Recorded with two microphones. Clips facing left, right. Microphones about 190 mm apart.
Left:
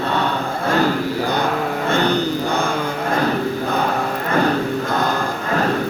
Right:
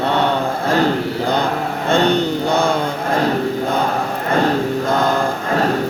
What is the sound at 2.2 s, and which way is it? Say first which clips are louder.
Mantra: right 3 dB; 70° right (ahead or behind).